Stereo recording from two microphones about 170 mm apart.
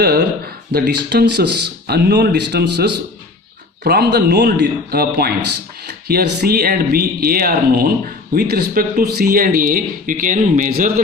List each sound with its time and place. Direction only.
0.0 s speech: 65° right (ahead or behind)